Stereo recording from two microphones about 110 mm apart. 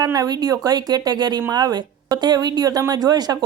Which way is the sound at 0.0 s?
35° right (ahead or behind).